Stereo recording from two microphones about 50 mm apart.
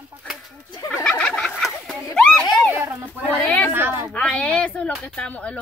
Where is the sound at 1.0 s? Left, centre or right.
Centre.